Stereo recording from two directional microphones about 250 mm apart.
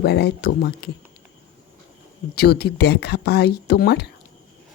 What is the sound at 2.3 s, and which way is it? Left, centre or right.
Speech, left.